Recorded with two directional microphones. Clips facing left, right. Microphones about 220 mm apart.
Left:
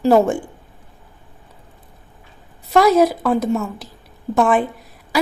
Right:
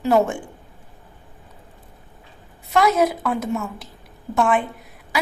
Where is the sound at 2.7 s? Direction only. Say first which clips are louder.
Left 5 dB; 35° left (ahead or behind).